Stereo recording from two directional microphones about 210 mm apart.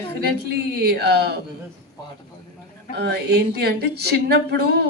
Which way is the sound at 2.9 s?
50° right (ahead or behind).